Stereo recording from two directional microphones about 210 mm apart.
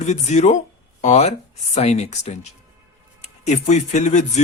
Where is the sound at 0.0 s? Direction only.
35° left (ahead or behind).